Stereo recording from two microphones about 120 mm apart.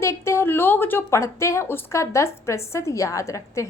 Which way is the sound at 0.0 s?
20° left (ahead or behind).